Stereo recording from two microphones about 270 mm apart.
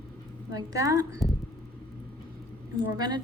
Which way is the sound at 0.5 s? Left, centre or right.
Centre.